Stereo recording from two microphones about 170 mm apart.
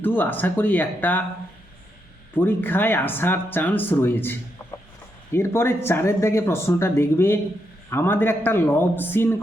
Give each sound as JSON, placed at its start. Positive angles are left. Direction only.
{"t": 0.0, "sound": "speech", "side_deg": 10}
{"t": 2.3, "sound": "speech", "side_deg": 10}